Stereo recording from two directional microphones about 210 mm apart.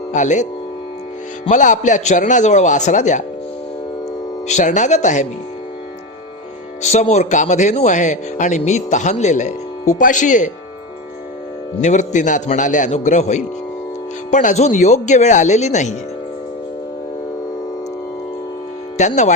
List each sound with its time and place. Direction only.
0.1 s speech: 35° left (ahead or behind)
1.5 s speech: 35° left (ahead or behind)
4.4 s speech: 35° left (ahead or behind)
6.8 s speech: 35° left (ahead or behind)
11.8 s speech: 35° left (ahead or behind)
18.9 s speech: 35° left (ahead or behind)